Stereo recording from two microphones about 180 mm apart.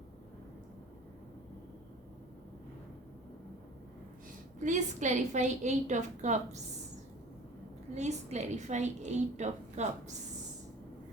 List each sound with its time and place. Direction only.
4.6 s a woman's voice: 45° right (ahead or behind)
7.9 s a woman's voice: 40° right (ahead or behind)